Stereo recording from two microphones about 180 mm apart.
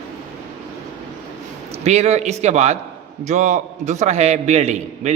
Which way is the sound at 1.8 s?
35° right (ahead or behind).